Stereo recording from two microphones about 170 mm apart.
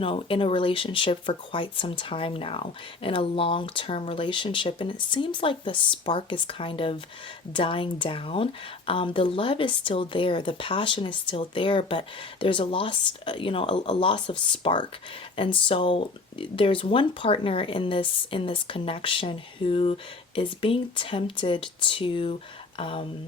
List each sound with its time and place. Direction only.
0.0 s speech: 30° left (ahead or behind)